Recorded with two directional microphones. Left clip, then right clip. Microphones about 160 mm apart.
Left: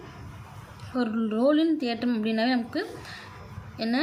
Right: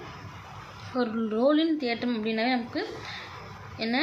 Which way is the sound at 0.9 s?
30° left (ahead or behind).